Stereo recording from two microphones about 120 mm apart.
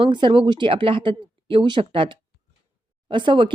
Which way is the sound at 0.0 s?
45° right (ahead or behind).